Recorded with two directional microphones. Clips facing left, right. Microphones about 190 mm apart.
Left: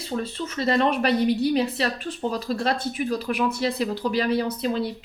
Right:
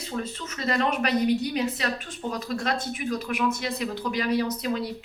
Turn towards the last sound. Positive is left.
turn(degrees=30)  # may be behind; listen again after turning